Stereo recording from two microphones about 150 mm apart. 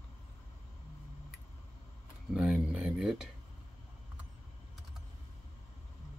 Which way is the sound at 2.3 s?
5° right (ahead or behind).